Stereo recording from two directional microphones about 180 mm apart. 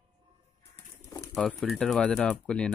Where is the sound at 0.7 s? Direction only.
15° left (ahead or behind).